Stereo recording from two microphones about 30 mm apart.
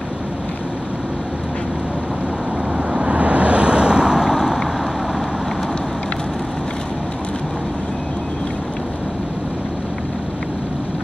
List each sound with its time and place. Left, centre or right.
2.9 s vehicle: right